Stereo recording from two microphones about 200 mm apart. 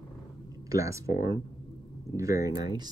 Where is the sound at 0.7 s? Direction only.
15° right (ahead or behind).